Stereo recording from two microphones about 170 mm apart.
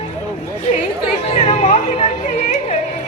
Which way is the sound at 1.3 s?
35° left (ahead or behind).